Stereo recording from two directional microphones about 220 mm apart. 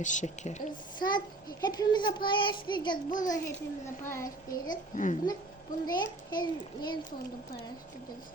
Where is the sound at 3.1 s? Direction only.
35° left (ahead or behind).